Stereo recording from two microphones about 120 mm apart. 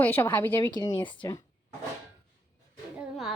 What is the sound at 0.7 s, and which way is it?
Speech, 30° left (ahead or behind).